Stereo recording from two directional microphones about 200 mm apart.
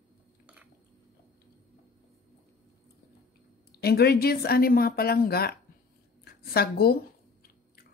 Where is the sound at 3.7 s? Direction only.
50° left (ahead or behind).